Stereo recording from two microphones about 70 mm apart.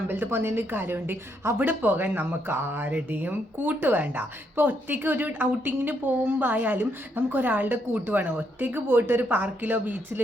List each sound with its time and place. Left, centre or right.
0.1 s a woman's voice: right